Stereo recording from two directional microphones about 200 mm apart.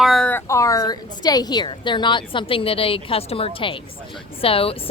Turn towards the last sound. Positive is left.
turn(degrees=30)  # may be behind; listen again after turning